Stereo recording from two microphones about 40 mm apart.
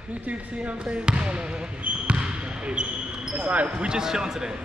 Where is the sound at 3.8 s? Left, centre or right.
Centre.